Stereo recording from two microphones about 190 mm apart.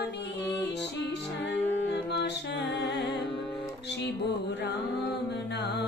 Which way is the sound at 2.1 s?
65° left (ahead or behind).